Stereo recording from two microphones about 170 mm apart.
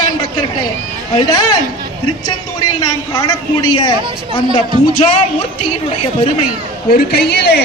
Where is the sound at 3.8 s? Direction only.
30° left (ahead or behind).